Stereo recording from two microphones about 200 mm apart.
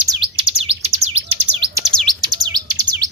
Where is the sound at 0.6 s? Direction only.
30° right (ahead or behind).